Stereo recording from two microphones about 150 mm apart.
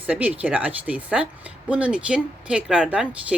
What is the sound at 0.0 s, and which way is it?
Speech, 10° right (ahead or behind).